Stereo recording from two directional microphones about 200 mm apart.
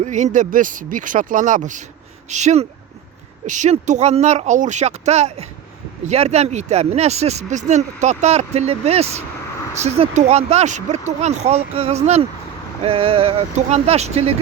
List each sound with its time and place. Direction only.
0.0 s speech: 35° right (ahead or behind)